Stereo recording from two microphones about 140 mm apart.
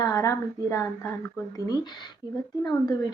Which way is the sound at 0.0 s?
25° left (ahead or behind).